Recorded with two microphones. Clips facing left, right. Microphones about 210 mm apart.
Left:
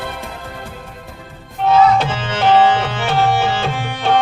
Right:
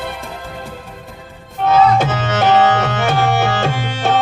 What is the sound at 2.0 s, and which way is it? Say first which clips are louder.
Music: right 3 dB; 45° right (ahead or behind).